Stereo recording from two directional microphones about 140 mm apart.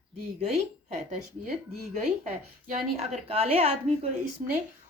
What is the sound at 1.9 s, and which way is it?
A woman's voice, 55° right (ahead or behind).